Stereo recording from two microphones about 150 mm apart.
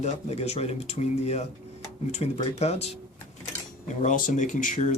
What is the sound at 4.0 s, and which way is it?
Speech, 60° left (ahead or behind).